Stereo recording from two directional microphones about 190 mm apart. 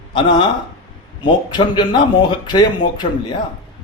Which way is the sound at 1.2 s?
25° left (ahead or behind).